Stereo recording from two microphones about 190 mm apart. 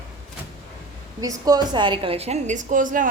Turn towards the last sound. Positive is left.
turn(degrees=-45)  # may be behind; listen again after turning